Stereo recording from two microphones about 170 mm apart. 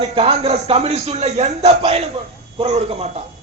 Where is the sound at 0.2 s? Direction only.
35° right (ahead or behind).